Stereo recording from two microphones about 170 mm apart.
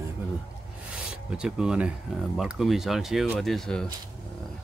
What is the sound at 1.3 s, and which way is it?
Speech, 5° right (ahead or behind).